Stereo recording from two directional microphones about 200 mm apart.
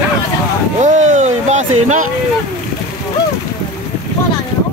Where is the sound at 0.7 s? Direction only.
35° right (ahead or behind).